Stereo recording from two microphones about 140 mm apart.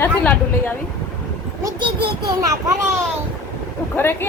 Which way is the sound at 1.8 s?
30° right (ahead or behind).